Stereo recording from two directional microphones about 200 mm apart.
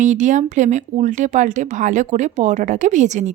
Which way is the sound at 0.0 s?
40° right (ahead or behind).